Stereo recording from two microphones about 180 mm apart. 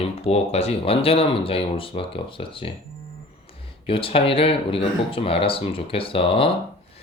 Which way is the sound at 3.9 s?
30° left (ahead or behind).